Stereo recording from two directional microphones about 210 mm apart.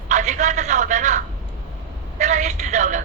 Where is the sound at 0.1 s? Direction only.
35° right (ahead or behind).